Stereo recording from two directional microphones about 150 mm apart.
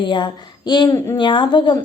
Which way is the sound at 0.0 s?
30° left (ahead or behind).